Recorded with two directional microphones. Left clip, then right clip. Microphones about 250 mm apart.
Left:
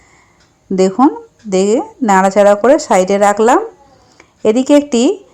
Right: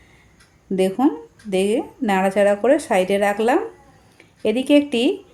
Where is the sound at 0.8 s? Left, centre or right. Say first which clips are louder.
Left 8 dB; left.